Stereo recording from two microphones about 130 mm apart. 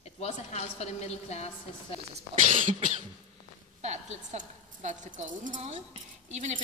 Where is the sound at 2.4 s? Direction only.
75° right (ahead or behind).